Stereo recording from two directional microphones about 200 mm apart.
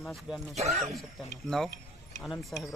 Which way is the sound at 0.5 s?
35° right (ahead or behind).